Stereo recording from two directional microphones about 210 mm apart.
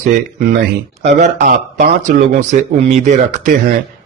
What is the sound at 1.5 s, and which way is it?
Speech, 45° right (ahead or behind).